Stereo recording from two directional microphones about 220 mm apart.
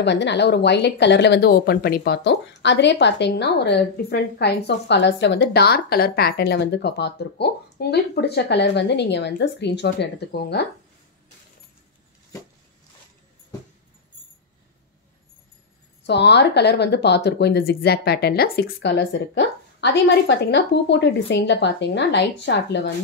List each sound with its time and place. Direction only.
0.0 s speech: 50° left (ahead or behind)
16.0 s speech: 50° left (ahead or behind)